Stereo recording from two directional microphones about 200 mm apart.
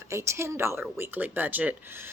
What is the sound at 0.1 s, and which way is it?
Speech, 15° right (ahead or behind).